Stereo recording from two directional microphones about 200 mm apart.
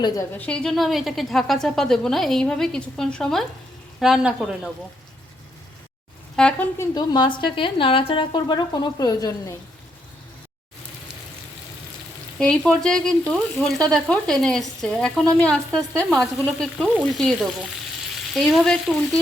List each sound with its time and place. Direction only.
0.0 s speech: 10° left (ahead or behind); by 4.7 s 5° right (ahead or behind)
6.3 s speech: 5° left (ahead or behind)
6.9 s a woman's voice: 20° left (ahead or behind)
12.4 s speech: 5° left (ahead or behind)